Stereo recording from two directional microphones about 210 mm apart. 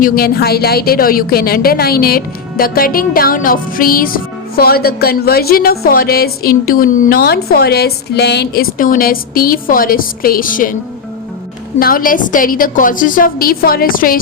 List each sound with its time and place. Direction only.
0.0 s a woman's voice: 45° left (ahead or behind)
11.8 s a woman's voice: 45° left (ahead or behind)